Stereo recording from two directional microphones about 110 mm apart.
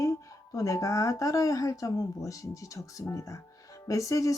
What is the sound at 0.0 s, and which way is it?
Speech, 30° left (ahead or behind).